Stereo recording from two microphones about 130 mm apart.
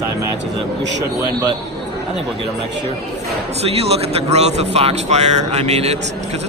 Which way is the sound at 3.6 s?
50° right (ahead or behind).